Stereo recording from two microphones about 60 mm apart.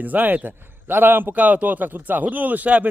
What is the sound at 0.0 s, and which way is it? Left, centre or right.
A man's voice, right.